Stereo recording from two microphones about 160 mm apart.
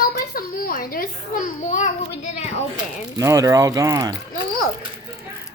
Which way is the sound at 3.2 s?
20° right (ahead or behind).